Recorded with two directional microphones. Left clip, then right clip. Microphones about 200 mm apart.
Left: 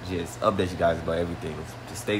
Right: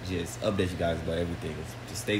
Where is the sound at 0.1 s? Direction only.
5° right (ahead or behind).